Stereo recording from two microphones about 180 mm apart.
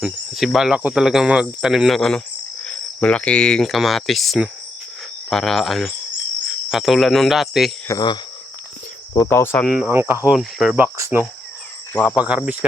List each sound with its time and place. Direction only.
0.0 s speech: centre (ahead or behind)
7.9 s speech: 25° left (ahead or behind)
9.1 s cricket: 15° left (ahead or behind)
9.6 s speech: 5° right (ahead or behind)
10.2 s speech: centre (ahead or behind)
10.9 s speech: 15° right (ahead or behind)
12.0 s speech: 5° right (ahead or behind)